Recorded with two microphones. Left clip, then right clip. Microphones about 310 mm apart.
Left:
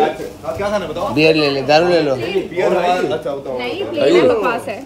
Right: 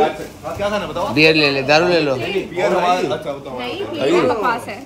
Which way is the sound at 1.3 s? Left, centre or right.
Right.